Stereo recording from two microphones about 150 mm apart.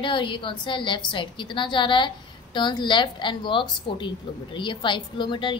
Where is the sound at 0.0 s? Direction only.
35° left (ahead or behind).